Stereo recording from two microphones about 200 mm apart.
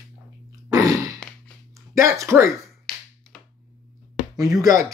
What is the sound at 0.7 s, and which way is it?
Sigh, 15° right (ahead or behind).